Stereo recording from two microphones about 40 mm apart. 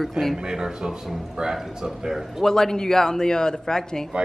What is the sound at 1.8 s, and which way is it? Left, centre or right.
Speech, centre.